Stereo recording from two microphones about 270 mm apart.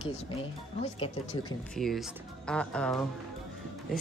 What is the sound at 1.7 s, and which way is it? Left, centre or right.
Speech, centre.